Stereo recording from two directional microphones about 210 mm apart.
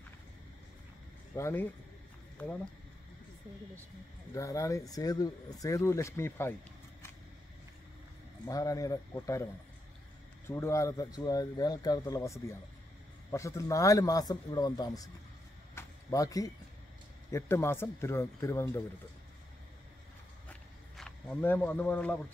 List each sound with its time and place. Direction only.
1.3 s speech: 10° left (ahead or behind)
4.3 s speech: 15° left (ahead or behind)
8.5 s speech: 15° left (ahead or behind)
10.5 s speech: 15° left (ahead or behind)
15.7 s a sound: 15° left (ahead or behind)
17.3 s speech: 10° left (ahead or behind)
20.4 s a sound: centre (ahead or behind)